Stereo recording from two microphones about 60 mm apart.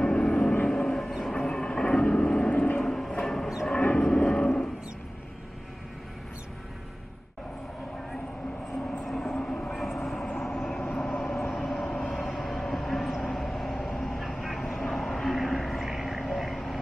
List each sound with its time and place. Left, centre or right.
0.0 s vehicle: left
0.7 s a sound: centre
1.3 s train: centre
2.0 s vehicle: centre
2.8 s a sound: centre
3.3 s music: centre
3.7 s a sound: centre
9.0 s vehicle: centre
9.3 s train: centre
9.7 s vehicle: centre